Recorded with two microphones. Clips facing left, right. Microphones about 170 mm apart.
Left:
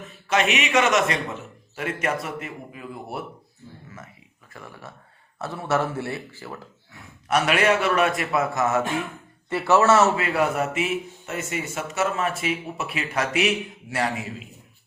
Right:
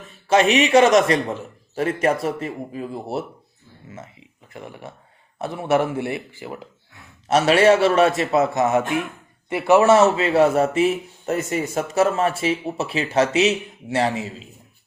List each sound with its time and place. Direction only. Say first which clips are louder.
0.3 s a man's voice: right 7 dB; 30° right (ahead or behind)
7.3 s a man's voice: right 6 dB; 30° right (ahead or behind)